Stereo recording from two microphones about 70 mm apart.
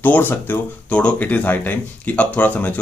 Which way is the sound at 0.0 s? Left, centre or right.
Left.